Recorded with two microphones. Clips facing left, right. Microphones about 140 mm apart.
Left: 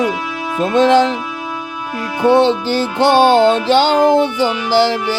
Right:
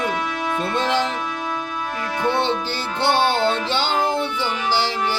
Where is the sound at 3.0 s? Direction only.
90° left.